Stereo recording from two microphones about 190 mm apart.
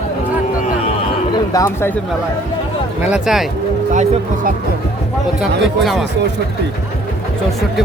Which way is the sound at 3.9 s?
40° right (ahead or behind).